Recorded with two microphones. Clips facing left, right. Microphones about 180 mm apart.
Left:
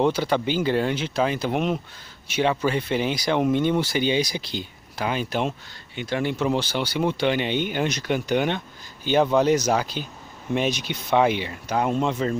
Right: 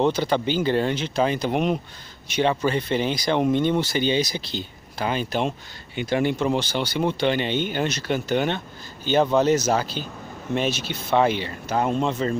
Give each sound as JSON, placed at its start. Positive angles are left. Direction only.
{"t": 0.0, "sound": "speech", "side_deg": 10}
{"t": 5.9, "sound": "speech", "side_deg": -5}